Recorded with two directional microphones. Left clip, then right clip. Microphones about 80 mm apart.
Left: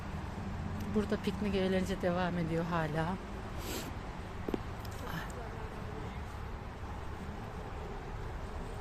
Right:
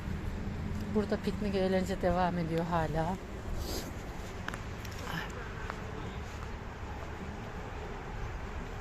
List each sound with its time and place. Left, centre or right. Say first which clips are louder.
0.9 s speech: right 2 dB; left